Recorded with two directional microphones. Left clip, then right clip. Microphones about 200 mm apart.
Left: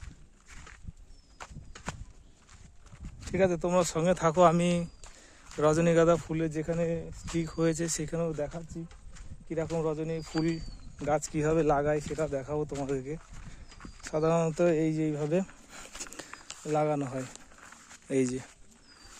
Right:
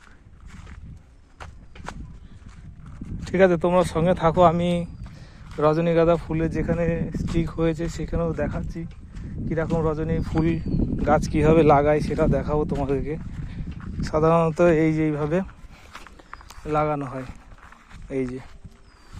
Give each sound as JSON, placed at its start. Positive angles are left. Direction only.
{"t": 1.4, "sound": "horse", "side_deg": -55}
{"t": 3.2, "sound": "speech", "side_deg": -5}
{"t": 3.7, "sound": "a man's voice", "side_deg": 10}
{"t": 8.3, "sound": "a man's voice", "side_deg": 10}
{"t": 8.8, "sound": "speech", "side_deg": 0}
{"t": 9.1, "sound": "a sound", "side_deg": -55}
{"t": 9.5, "sound": "a man's voice", "side_deg": 15}
{"t": 13.7, "sound": "a sound", "side_deg": -50}
{"t": 14.0, "sound": "a man's voice", "side_deg": 10}
{"t": 16.6, "sound": "speech", "side_deg": 25}